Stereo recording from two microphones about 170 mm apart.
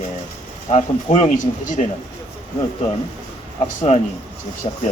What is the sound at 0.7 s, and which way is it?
A man's voice, 40° left (ahead or behind).